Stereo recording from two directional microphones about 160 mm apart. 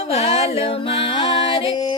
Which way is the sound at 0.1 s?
40° left (ahead or behind).